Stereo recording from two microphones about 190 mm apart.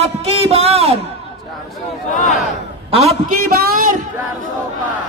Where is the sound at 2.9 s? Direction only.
35° right (ahead or behind).